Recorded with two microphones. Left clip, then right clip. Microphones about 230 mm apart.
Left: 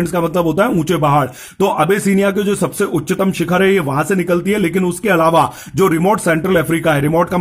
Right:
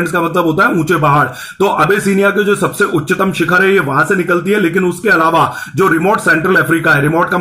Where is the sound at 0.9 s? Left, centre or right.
Left.